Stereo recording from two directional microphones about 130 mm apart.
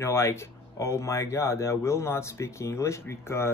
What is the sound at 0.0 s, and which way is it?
Speech, 20° left (ahead or behind).